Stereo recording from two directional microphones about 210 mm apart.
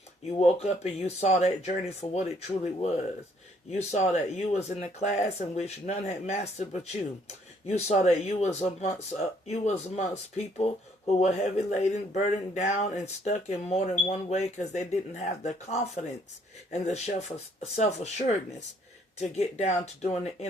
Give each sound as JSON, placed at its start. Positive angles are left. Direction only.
{"t": 0.3, "sound": "speech", "side_deg": 30}
{"t": 3.7, "sound": "speech", "side_deg": 35}
{"t": 19.4, "sound": "speech", "side_deg": 30}